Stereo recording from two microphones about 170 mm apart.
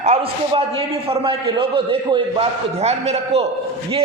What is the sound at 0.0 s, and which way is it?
A man's voice, 40° right (ahead or behind).